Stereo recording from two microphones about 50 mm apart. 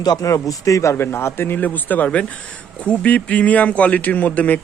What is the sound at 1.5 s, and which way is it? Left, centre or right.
A man's voice, left.